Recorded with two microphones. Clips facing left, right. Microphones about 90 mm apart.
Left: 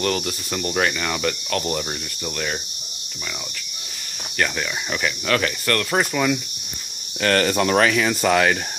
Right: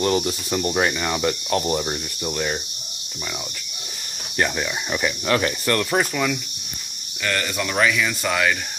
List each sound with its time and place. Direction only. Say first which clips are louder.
0.0 s cricket: right 3 dB; 20° right (ahead or behind)
4.4 s cricket: right 1 dB; 15° right (ahead or behind)
5.9 s speech: left 1 dB; centre (ahead or behind)
7.2 s speech: left 6 dB; 55° left (ahead or behind)